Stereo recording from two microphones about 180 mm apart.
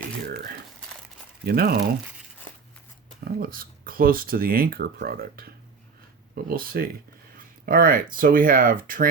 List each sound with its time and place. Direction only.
1.5 s speech: 55° right (ahead or behind)
3.2 s speech: 55° right (ahead or behind)
7.3 s a sound: 50° right (ahead or behind)
8.1 s speech: 50° right (ahead or behind)